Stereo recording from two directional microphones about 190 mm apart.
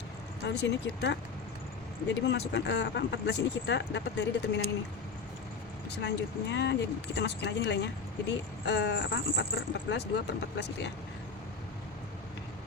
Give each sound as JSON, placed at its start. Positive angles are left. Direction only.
{"t": 0.4, "sound": "speech", "side_deg": 65}
{"t": 5.9, "sound": "speech", "side_deg": 65}